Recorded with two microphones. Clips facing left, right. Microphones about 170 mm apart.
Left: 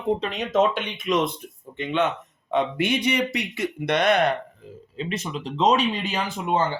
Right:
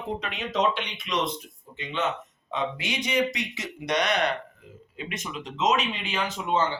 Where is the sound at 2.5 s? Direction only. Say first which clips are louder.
Left 7 dB; 60° left (ahead or behind).